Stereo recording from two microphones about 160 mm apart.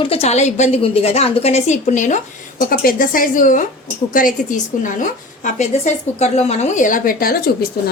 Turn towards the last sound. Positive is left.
turn(degrees=70)  # may be behind; listen again after turning